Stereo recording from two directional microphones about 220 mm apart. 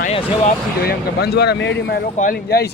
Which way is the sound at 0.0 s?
25° left (ahead or behind).